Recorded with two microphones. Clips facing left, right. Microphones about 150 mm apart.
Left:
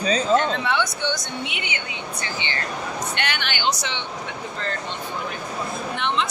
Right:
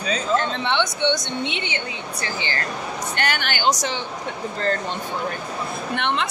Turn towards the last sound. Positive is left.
turn(degrees=-60)  # may be behind; listen again after turning